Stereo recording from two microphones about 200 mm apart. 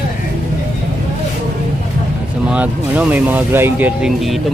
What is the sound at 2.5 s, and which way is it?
Speech, 5° right (ahead or behind).